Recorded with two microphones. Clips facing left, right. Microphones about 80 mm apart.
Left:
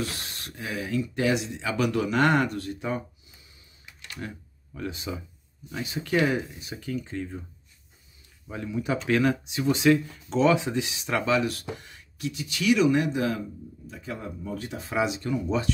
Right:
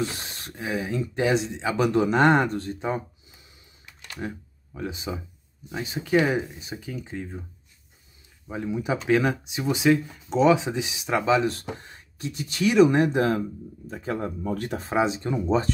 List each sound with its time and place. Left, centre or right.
0.0 s speech: right
4.7 s speech: centre
8.5 s speech: centre; by 14.9 s right
14.9 s speech: right